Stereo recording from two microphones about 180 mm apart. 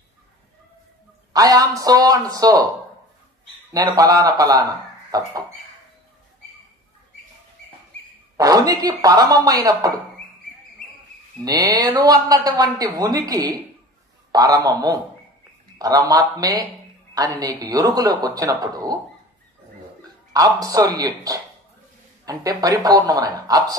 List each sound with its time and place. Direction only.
1.3 s speech: 20° right (ahead or behind)
3.7 s speech: 20° right (ahead or behind)
8.4 s speech: 20° right (ahead or behind)
11.4 s speech: 20° right (ahead or behind)
20.3 s speech: 20° right (ahead or behind)